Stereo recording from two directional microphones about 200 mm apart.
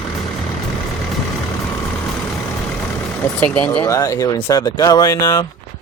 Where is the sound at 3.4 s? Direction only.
5° left (ahead or behind).